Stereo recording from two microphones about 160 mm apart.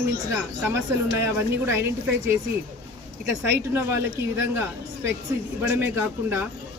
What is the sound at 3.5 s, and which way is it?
Speech, 15° right (ahead or behind).